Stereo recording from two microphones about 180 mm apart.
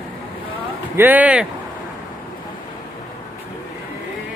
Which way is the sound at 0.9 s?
10° right (ahead or behind).